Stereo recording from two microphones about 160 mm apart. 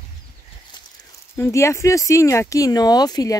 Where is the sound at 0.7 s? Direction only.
30° left (ahead or behind).